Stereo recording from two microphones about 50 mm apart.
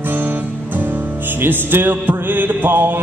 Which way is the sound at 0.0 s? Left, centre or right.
Right.